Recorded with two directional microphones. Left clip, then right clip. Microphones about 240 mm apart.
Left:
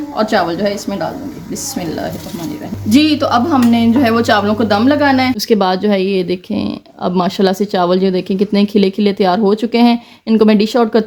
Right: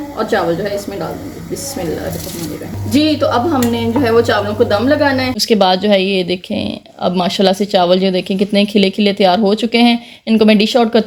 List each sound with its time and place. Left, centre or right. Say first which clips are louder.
0.2 s speech: left 1 dB; left
2.9 s speech: left 1 dB; left
5.4 s speech: right 1 dB; centre